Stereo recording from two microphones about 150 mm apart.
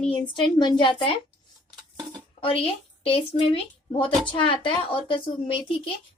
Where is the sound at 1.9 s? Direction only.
30° right (ahead or behind).